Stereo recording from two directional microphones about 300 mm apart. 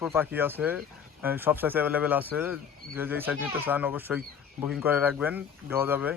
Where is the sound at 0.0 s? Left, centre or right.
Centre.